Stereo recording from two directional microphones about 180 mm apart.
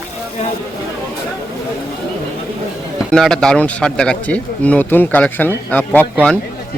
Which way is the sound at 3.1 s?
5° left (ahead or behind).